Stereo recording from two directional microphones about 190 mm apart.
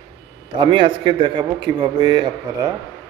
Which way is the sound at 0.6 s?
25° right (ahead or behind).